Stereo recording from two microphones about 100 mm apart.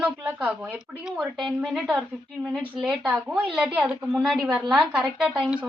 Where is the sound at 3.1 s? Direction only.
15° right (ahead or behind).